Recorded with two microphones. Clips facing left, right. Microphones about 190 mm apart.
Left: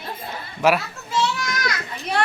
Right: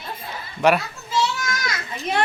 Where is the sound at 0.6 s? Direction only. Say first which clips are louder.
Right 1 dB; centre (ahead or behind).